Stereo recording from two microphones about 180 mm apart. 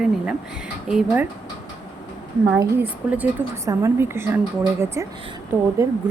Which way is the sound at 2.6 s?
10° right (ahead or behind).